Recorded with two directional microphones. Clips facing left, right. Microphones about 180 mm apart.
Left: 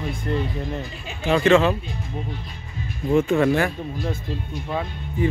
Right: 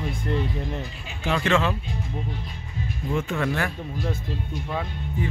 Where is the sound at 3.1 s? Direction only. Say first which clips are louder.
Left 8 dB; 15° left (ahead or behind).